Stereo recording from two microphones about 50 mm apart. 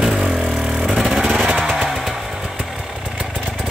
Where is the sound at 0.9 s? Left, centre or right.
Centre.